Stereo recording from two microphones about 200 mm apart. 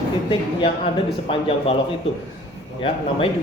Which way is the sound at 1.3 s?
25° left (ahead or behind).